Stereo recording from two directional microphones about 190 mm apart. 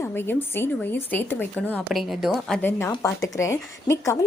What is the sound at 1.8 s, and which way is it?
Speech, centre (ahead or behind).